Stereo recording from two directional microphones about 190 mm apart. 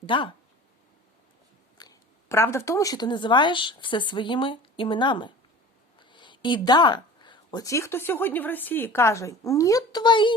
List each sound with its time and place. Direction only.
0.0 s speech: 25° left (ahead or behind)
1.8 s speech: 15° left (ahead or behind)